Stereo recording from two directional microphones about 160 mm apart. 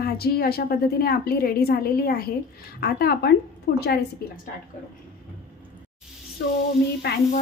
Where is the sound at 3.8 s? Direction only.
90° left.